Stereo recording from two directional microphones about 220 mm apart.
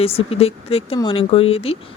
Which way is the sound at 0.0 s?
25° left (ahead or behind).